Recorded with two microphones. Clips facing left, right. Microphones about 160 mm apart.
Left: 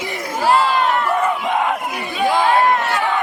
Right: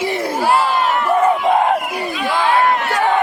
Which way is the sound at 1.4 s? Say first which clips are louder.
Right 5 dB; 35° right (ahead or behind).